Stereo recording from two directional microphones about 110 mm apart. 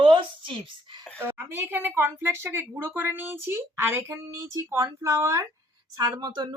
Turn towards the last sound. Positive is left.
turn(degrees=-40)  # may be behind; listen again after turning